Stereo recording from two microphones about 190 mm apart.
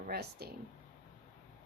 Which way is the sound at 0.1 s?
55° right (ahead or behind).